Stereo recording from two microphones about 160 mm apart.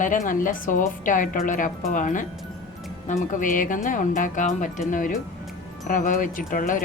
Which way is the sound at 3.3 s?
55° left (ahead or behind).